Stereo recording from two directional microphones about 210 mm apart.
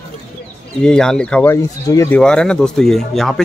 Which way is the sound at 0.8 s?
5° left (ahead or behind).